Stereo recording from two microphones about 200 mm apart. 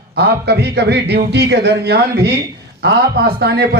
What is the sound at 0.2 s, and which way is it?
A man's voice, 55° right (ahead or behind).